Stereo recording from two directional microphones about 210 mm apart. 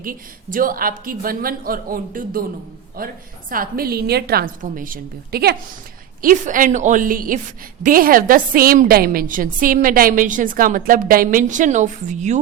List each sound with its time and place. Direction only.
0.0 s a woman's voice: 40° right (ahead or behind)